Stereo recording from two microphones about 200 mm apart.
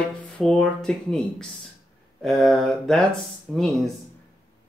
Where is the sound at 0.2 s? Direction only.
5° left (ahead or behind).